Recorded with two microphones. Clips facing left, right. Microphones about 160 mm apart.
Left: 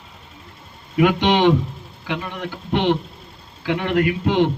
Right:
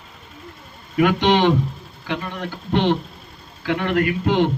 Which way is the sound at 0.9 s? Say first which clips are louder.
Even; 15° left (ahead or behind).